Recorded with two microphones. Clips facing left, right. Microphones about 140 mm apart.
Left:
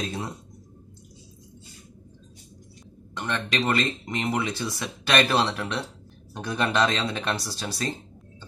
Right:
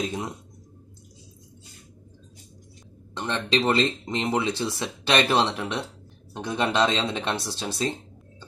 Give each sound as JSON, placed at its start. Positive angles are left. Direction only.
{"t": 0.0, "sound": "speech", "side_deg": -15}
{"t": 3.2, "sound": "speech", "side_deg": -25}